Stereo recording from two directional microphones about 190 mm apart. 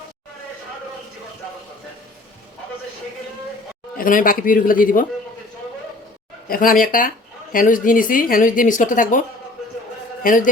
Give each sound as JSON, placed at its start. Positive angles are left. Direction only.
{"t": 3.9, "sound": "speech", "side_deg": 45}
{"t": 6.5, "sound": "speech", "side_deg": 45}
{"t": 10.2, "sound": "speech", "side_deg": 45}